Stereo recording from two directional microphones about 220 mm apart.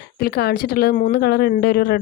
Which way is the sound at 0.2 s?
45° left (ahead or behind).